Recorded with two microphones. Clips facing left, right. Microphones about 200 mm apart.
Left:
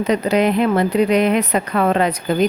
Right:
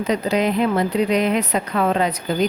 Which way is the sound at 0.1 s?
65° left (ahead or behind).